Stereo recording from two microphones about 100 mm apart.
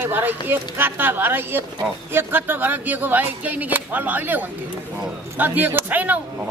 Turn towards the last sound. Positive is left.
turn(degrees=-15)  # may be behind; listen again after turning